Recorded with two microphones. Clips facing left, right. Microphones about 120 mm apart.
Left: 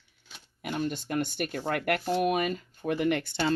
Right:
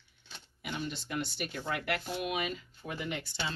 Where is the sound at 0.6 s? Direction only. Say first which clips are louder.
Left 7 dB; 50° left (ahead or behind).